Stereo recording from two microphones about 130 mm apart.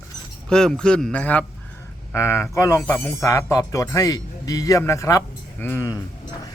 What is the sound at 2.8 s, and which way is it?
Speech, 10° left (ahead or behind).